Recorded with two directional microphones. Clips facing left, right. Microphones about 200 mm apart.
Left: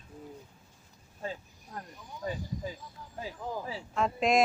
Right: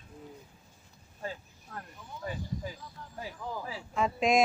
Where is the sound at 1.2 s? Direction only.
15° left (ahead or behind).